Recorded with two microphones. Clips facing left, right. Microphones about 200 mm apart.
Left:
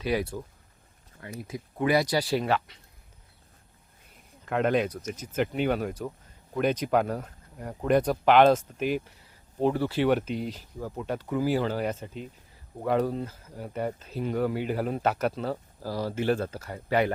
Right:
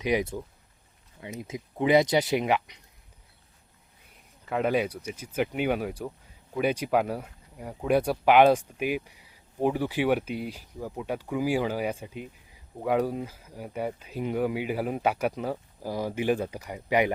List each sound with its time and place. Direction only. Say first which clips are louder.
0.0 s speech: right 2 dB; 20° right (ahead or behind)
4.4 s speech: left 1 dB; 5° right (ahead or behind)